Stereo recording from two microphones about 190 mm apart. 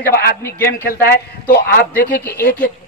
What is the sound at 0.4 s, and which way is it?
Speech, 15° left (ahead or behind).